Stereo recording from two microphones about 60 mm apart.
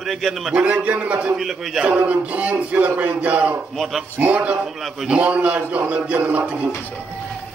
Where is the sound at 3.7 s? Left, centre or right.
Centre.